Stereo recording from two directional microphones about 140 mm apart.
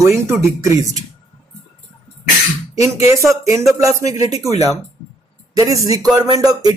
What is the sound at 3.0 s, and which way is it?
Speech, 20° right (ahead or behind).